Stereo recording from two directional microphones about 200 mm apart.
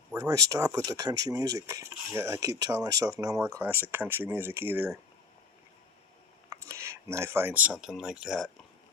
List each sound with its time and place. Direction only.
0.1 s speech: 15° right (ahead or behind)
6.5 s speech: 15° right (ahead or behind)